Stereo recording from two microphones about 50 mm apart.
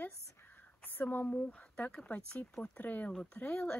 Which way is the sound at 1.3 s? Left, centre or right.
Left.